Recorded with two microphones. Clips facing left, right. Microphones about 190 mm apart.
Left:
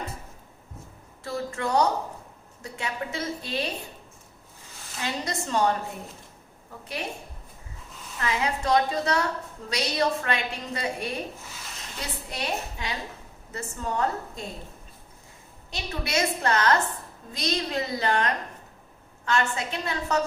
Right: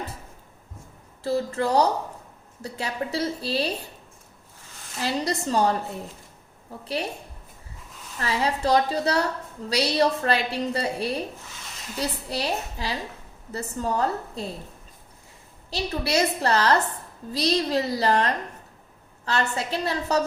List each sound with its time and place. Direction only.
1.2 s a woman's voice: 35° right (ahead or behind)
4.9 s a woman's voice: 35° right (ahead or behind)
6.8 s a woman's voice: 30° right (ahead or behind)
8.2 s a woman's voice: 35° right (ahead or behind)
15.7 s a woman's voice: 35° right (ahead or behind)